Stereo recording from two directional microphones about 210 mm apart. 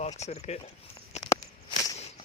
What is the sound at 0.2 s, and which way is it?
Speech, 30° left (ahead or behind).